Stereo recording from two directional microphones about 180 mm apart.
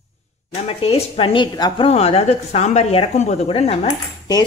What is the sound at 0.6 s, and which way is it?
A woman's voice, 35° left (ahead or behind).